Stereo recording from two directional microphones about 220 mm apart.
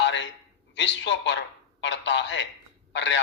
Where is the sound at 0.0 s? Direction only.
55° left (ahead or behind).